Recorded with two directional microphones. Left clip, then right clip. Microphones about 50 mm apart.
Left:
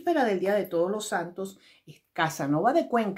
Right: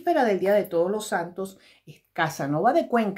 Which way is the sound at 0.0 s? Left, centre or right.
Right.